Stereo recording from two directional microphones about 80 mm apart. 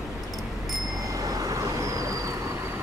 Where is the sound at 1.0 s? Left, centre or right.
Right.